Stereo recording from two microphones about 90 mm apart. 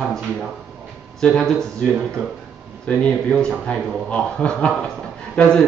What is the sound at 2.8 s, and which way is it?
A man's voice, 10° left (ahead or behind).